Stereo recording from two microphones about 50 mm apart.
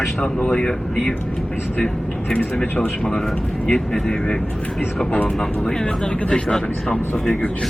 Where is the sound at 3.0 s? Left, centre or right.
Centre.